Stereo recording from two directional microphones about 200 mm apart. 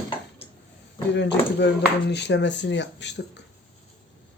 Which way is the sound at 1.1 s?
60° left (ahead or behind).